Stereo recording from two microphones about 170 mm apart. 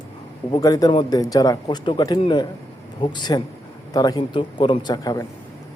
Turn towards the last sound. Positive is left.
turn(degrees=25)  # may be behind; listen again after turning